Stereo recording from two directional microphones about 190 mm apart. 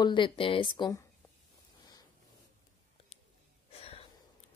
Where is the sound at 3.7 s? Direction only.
30° left (ahead or behind).